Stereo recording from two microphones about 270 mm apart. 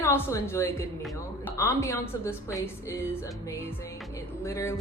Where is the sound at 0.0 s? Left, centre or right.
Centre.